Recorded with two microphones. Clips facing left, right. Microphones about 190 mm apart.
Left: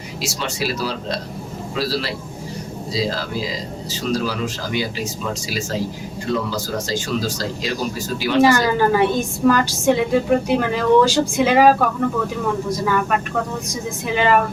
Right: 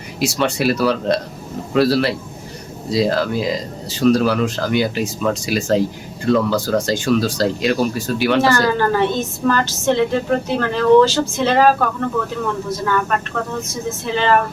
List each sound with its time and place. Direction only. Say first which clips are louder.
0.2 s speech: right 7 dB; 60° right (ahead or behind)
8.4 s a woman's voice: left 5 dB; 15° left (ahead or behind)